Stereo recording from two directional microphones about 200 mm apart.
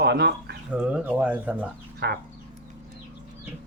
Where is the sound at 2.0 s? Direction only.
55° right (ahead or behind).